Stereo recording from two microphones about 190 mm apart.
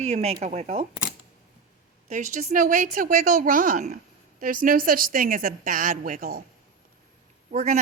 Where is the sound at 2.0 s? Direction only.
40° right (ahead or behind).